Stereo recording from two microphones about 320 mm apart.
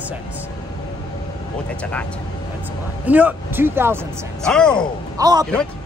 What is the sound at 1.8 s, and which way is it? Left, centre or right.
Speech, centre.